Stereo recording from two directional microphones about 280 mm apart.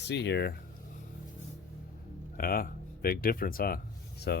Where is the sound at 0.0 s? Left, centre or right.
Left.